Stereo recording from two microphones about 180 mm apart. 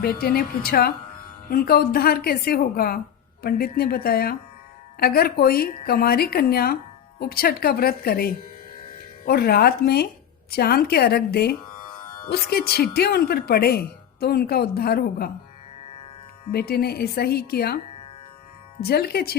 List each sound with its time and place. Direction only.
0.0 s speech: 55° left (ahead or behind)
16.5 s speech: 60° left (ahead or behind)
18.8 s speech: 60° left (ahead or behind)